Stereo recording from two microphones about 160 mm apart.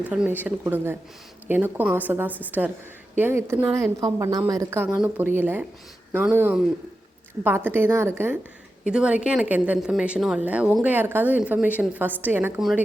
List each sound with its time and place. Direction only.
0.1 s a woman's voice: 10° right (ahead or behind)